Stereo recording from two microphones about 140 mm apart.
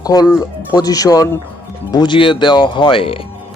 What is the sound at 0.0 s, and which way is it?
Speech, 25° left (ahead or behind).